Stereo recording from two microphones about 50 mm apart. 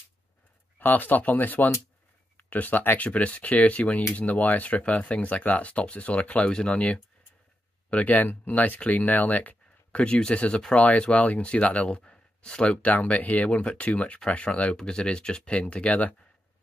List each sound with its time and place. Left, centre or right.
0.7 s speech: left
3.0 s speech: left
10.0 s speech: centre